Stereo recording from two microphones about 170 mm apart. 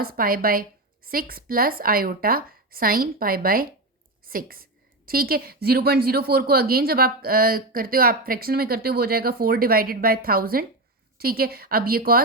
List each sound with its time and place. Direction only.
0.0 s a woman's voice: 60° right (ahead or behind)